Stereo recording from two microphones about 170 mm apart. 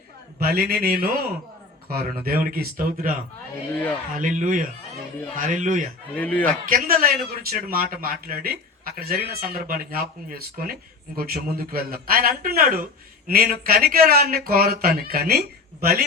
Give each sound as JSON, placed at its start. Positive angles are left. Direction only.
{"t": 0.4, "sound": "speech", "side_deg": -65}
{"t": 3.7, "sound": "speech", "side_deg": 10}
{"t": 4.1, "sound": "speech", "side_deg": -50}
{"t": 6.1, "sound": "speech", "side_deg": 10}
{"t": 6.7, "sound": "speech", "side_deg": -55}